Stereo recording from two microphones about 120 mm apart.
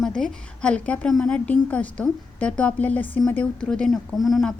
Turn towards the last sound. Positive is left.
turn(degrees=0)  # may be behind; listen again after turning